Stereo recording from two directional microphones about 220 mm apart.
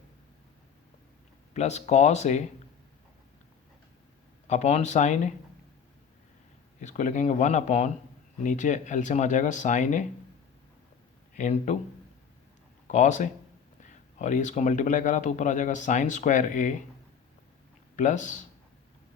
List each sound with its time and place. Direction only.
1.5 s speech: 30° left (ahead or behind)
4.4 s speech: 30° left (ahead or behind)
6.8 s speech: 35° left (ahead or behind)
11.3 s speech: 35° left (ahead or behind)
12.9 s speech: 35° left (ahead or behind)
17.9 s speech: 35° left (ahead or behind)